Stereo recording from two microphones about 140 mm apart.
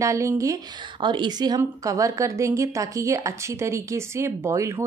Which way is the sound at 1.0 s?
35° right (ahead or behind).